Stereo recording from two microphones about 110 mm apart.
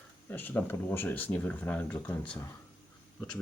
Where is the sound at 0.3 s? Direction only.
15° left (ahead or behind).